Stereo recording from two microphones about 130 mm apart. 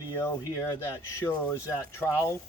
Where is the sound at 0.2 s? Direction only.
20° left (ahead or behind).